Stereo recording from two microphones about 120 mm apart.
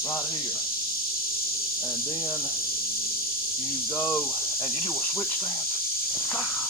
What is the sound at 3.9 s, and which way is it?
Speech, 20° left (ahead or behind).